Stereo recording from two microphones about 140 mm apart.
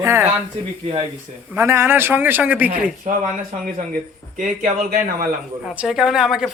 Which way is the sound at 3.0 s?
75° right (ahead or behind).